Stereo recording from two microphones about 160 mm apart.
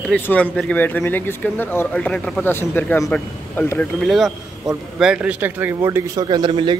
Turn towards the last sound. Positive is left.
turn(degrees=-30)  # may be behind; listen again after turning